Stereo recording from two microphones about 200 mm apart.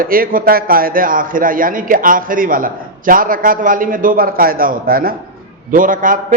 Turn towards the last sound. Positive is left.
turn(degrees=-40)  # may be behind; listen again after turning